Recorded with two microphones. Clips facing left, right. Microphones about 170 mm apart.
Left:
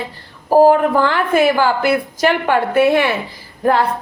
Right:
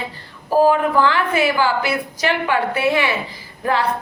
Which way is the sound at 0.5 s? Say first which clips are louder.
Left 4 dB; 45° left (ahead or behind).